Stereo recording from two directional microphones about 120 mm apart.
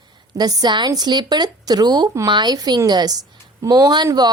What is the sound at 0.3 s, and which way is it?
A woman's voice, 35° right (ahead or behind).